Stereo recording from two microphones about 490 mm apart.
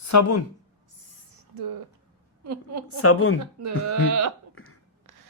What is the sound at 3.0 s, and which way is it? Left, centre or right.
Speech, left.